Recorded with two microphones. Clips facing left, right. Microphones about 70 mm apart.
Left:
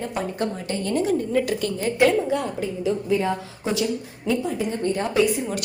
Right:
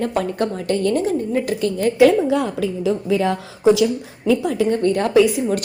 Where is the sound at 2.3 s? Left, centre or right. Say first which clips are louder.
Right 5 dB; right.